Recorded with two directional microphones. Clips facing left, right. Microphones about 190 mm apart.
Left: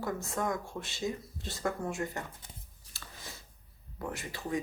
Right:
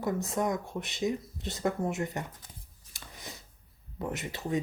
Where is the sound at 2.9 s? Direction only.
20° right (ahead or behind).